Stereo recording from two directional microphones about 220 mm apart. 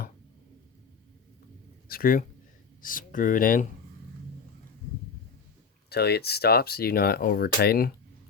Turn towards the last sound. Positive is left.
turn(degrees=45)  # may be behind; listen again after turning